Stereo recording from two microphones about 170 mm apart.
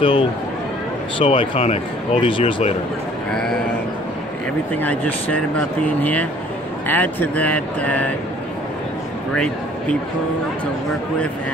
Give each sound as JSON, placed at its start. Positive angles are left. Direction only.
{"t": 0.0, "sound": "speech", "side_deg": 30}
{"t": 4.7, "sound": "speech", "side_deg": 10}
{"t": 6.9, "sound": "speech", "side_deg": 10}
{"t": 9.3, "sound": "a man's voice", "side_deg": 5}